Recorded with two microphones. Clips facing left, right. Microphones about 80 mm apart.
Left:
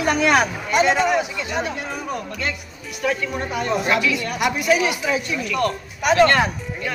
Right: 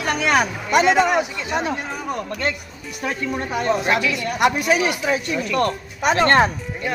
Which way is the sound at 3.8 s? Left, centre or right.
Right.